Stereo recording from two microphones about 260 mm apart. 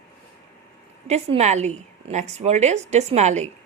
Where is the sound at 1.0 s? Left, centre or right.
Right.